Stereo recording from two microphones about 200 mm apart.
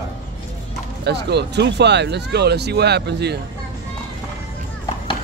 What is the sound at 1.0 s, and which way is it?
Speech, 55° right (ahead or behind).